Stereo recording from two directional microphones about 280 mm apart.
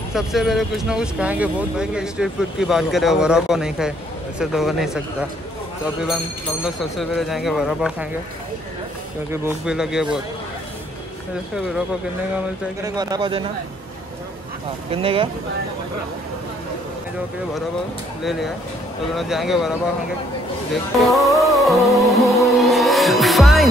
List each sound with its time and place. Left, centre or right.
0.1 s speech: centre
6.6 s speech: centre
9.3 s speech: centre
12.4 s speech: centre
14.9 s speech: centre
18.2 s speech: centre
21.1 s speech: centre
22.1 s music: centre